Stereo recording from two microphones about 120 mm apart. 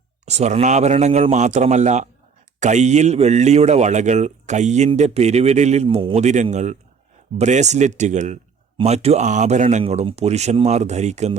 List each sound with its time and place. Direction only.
0.3 s speech: 65° right (ahead or behind); by 6.2 s 50° right (ahead or behind)
6.2 s speech: 75° right (ahead or behind)
8.8 s speech: 60° right (ahead or behind); by 9.8 s 75° right (ahead or behind)
9.8 s speech: 55° right (ahead or behind); by 11.3 s 70° right (ahead or behind)